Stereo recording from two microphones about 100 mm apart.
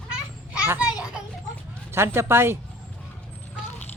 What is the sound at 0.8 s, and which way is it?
Children playing, 10° right (ahead or behind).